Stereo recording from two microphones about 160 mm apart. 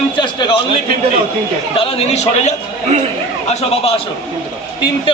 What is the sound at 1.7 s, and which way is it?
A man's voice, 35° left (ahead or behind).